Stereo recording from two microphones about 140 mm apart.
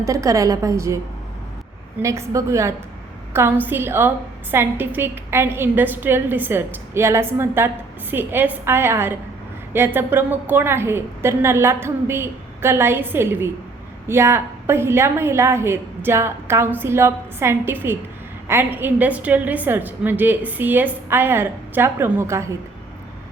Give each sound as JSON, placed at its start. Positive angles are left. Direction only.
{"t": 0.0, "sound": "a woman's voice", "side_deg": -25}
{"t": 2.0, "sound": "a woman's voice", "side_deg": -20}